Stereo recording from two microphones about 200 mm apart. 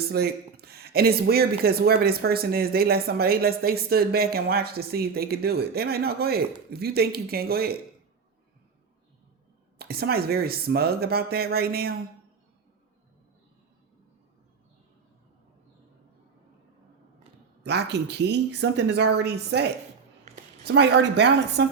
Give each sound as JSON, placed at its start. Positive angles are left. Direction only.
{"t": 0.1, "sound": "speech", "side_deg": -50}
{"t": 9.7, "sound": "speech", "side_deg": -50}
{"t": 17.6, "sound": "speech", "side_deg": -60}